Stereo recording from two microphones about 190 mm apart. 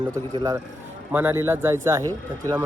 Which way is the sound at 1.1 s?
10° right (ahead or behind).